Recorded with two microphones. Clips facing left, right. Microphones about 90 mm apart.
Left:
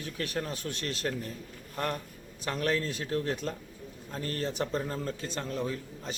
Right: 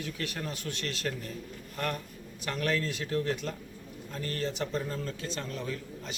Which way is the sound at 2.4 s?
30° left (ahead or behind).